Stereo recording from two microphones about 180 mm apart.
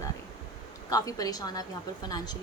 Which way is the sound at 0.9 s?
20° left (ahead or behind).